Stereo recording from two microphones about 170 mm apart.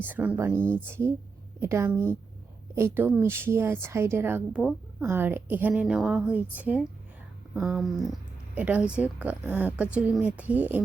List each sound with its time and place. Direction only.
0.0 s a woman's voice: 10° right (ahead or behind)
0.6 s speech: 10° left (ahead or behind)
0.9 s a woman's voice: 15° right (ahead or behind)